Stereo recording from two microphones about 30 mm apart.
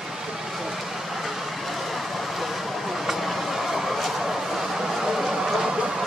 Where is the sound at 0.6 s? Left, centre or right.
Centre.